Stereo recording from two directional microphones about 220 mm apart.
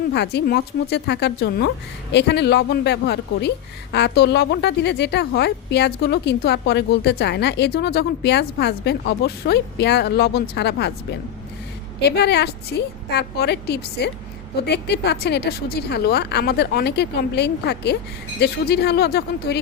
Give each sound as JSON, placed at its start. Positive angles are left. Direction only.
{"t": 0.1, "sound": "a woman's voice", "side_deg": 50}
{"t": 11.9, "sound": "a woman's voice", "side_deg": 50}